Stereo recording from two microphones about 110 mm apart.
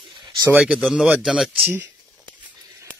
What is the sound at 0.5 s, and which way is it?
Speech, 10° right (ahead or behind).